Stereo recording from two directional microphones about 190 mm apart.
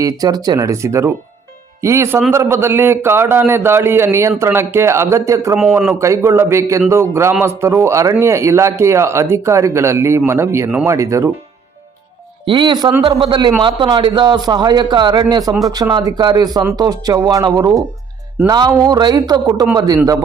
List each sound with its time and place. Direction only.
0.0 s speech: 20° right (ahead or behind)
12.5 s speech: 25° right (ahead or behind)